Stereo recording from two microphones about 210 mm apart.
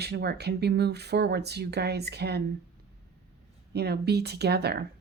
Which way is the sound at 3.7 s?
50° right (ahead or behind).